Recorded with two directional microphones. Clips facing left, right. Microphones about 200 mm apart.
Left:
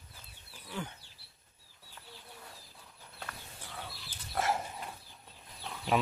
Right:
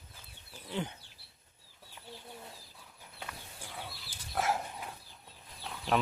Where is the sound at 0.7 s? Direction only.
20° right (ahead or behind).